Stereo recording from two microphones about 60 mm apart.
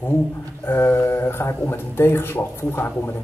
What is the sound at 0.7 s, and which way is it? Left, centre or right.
Speech, left.